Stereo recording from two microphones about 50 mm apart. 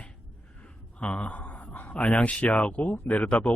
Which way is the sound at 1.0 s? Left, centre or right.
Left.